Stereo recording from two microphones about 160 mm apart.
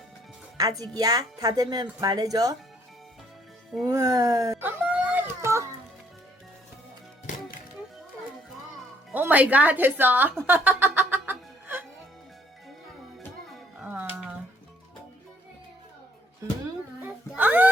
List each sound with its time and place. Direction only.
0.5 s speech: 20° right (ahead or behind)
3.8 s a sound: 20° right (ahead or behind)
9.1 s speech: 10° right (ahead or behind)
13.7 s music: 10° right (ahead or behind)
17.0 s speech: 10° right (ahead or behind)